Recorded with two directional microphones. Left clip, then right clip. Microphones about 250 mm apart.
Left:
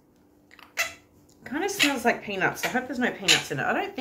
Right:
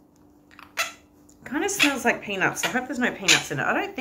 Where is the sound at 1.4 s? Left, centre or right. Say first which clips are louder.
Right 2 dB; centre.